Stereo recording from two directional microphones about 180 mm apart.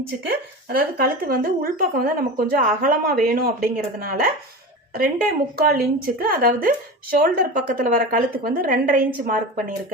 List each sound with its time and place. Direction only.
0.3 s a woman's voice: 55° right (ahead or behind)